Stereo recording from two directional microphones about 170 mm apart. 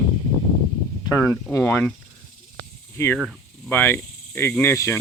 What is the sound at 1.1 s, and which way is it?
Speech, 20° left (ahead or behind).